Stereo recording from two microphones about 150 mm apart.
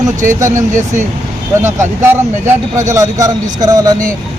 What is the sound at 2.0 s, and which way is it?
A man's voice, 15° right (ahead or behind).